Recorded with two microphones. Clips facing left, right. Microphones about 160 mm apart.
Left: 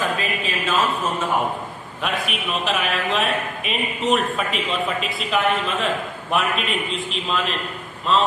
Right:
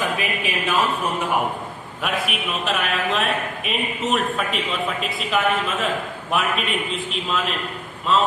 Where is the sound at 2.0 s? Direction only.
5° right (ahead or behind).